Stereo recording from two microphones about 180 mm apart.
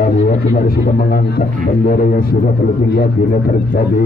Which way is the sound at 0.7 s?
55° left (ahead or behind).